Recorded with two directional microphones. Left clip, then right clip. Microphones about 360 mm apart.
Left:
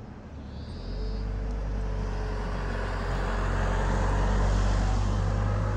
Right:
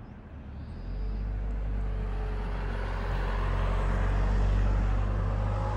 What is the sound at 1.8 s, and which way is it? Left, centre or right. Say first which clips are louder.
Vehicle: left 4 dB; left.